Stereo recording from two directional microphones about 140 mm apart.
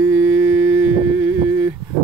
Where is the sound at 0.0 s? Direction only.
15° right (ahead or behind).